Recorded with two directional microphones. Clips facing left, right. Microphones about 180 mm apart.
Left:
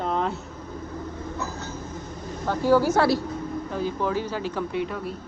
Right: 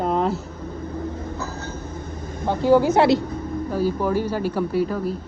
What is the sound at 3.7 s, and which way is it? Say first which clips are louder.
Speech: right 5 dB; 10° right (ahead or behind).